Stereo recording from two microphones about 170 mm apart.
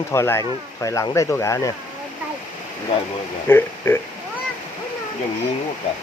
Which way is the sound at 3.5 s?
15° left (ahead or behind).